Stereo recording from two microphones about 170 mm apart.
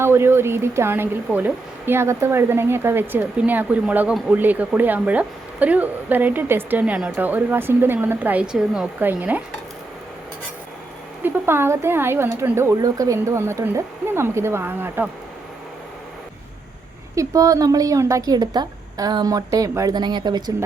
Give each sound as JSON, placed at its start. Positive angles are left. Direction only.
{"t": 0.0, "sound": "speech", "side_deg": -15}
{"t": 11.2, "sound": "speech", "side_deg": -15}
{"t": 17.2, "sound": "a woman's voice", "side_deg": -20}